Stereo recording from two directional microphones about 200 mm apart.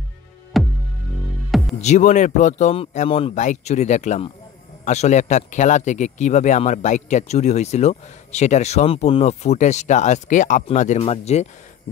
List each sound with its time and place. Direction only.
0.5 s music: centre (ahead or behind)
1.8 s speech: 35° left (ahead or behind)